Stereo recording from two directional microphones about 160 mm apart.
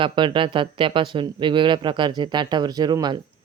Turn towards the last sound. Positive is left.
turn(degrees=-25)  # may be behind; listen again after turning